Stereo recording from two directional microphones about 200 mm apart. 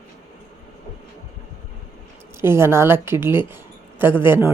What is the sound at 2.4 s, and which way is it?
A woman's voice, 10° right (ahead or behind).